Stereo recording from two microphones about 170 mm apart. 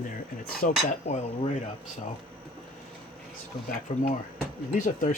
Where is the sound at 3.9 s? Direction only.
45° left (ahead or behind).